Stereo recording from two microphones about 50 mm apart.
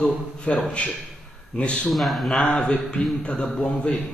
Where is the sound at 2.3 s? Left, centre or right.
Centre.